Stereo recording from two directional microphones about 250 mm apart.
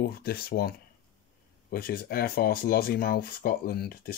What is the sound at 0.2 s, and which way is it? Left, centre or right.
Speech, left.